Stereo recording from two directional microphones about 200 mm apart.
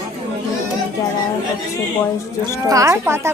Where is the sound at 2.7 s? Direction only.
15° right (ahead or behind).